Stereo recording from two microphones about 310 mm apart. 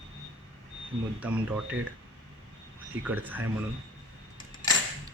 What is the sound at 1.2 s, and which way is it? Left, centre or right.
Speech, centre.